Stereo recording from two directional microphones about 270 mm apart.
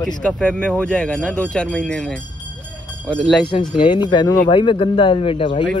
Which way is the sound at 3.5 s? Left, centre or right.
Centre.